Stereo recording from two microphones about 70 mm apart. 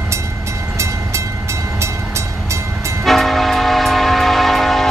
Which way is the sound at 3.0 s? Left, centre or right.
Centre.